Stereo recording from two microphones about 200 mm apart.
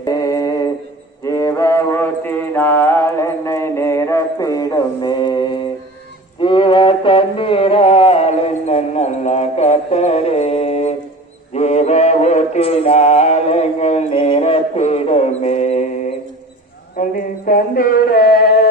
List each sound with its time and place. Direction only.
0.0 s a sound: 20° left (ahead or behind)
1.2 s mantra: 15° left (ahead or behind)
6.4 s music: 25° left (ahead or behind)
11.5 s mantra: 35° left (ahead or behind)
16.9 s male singing: 45° left (ahead or behind)